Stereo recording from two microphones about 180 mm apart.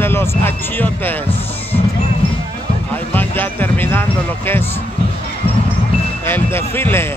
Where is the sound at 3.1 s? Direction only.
10° left (ahead or behind).